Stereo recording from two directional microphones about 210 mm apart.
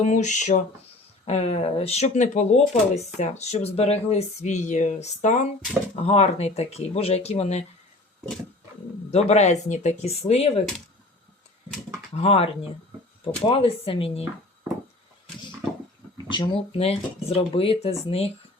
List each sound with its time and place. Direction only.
0.0 s speech: 35° left (ahead or behind)
9.0 s speech: 30° left (ahead or behind)
12.1 s speech: 30° left (ahead or behind)
13.5 s speech: 25° left (ahead or behind)
16.3 s speech: 25° left (ahead or behind)